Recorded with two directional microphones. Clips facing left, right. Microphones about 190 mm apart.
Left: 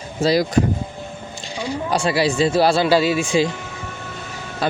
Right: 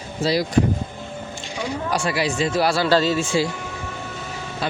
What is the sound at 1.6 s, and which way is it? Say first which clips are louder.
A man's voice: left 3 dB; 30° left (ahead or behind).